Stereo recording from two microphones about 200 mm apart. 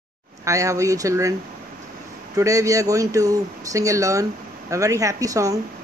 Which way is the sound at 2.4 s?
15° right (ahead or behind).